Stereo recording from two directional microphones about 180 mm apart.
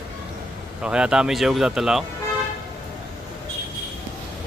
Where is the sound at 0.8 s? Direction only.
5° right (ahead or behind).